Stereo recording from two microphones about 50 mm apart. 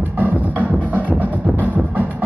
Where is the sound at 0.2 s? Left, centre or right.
Right.